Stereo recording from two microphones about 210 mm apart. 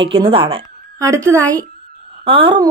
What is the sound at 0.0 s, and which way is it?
Speech, 25° right (ahead or behind).